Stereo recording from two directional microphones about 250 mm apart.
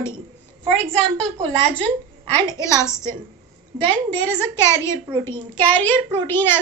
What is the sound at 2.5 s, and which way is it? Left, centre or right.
Speech, centre.